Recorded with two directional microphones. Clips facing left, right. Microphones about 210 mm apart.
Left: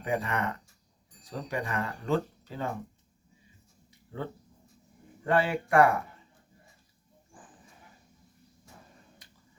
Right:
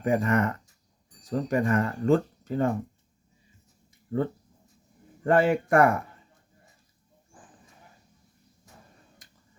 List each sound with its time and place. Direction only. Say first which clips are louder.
0.0 s speech: right 7 dB; 45° right (ahead or behind)
5.2 s speech: right 5 dB; 45° right (ahead or behind)